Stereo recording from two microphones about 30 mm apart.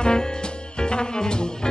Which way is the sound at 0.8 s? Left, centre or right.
Left.